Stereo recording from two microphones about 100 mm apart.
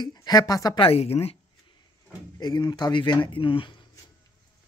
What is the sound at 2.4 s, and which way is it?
Speech, 45° left (ahead or behind).